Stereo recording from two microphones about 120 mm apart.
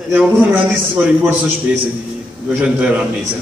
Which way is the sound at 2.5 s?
10° right (ahead or behind).